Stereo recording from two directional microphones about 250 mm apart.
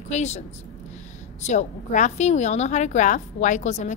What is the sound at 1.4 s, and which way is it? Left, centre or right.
A woman's voice, left.